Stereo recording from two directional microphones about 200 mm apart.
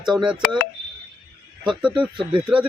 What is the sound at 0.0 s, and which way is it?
Speech, centre (ahead or behind).